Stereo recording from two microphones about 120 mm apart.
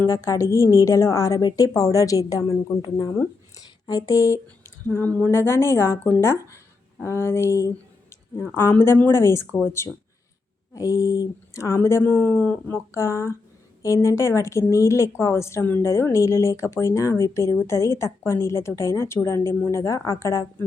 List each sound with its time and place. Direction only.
0.0 s a woman's voice: 25° left (ahead or behind)
3.8 s a woman's voice: 30° left (ahead or behind)
4.9 s a woman's voice: 15° left (ahead or behind)